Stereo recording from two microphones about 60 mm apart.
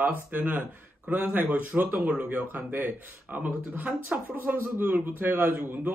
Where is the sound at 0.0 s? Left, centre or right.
Right.